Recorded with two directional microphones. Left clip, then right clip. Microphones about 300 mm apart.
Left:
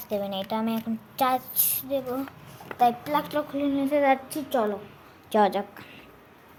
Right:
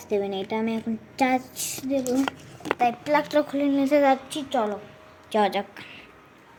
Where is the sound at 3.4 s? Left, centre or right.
Centre.